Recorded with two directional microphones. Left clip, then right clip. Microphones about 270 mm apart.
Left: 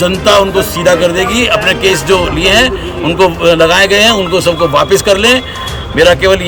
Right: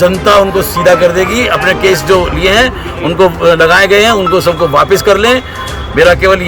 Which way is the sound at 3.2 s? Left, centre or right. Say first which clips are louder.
Right 1 dB; centre.